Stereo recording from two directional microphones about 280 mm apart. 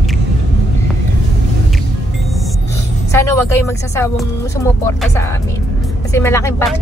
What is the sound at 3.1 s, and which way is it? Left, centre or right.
Speech, centre.